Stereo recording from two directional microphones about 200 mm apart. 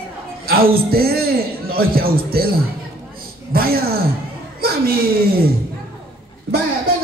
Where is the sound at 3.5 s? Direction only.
50° right (ahead or behind).